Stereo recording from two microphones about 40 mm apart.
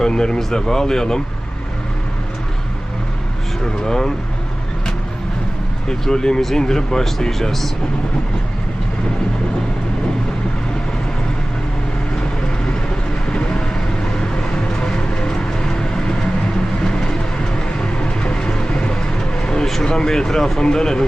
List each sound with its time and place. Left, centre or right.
0.0 s speech: centre
3.8 s speech: centre
5.9 s speech: centre
13.3 s vehicle: left
15.1 s vehicle: left
17.7 s vehicle: left
19.8 s speech: centre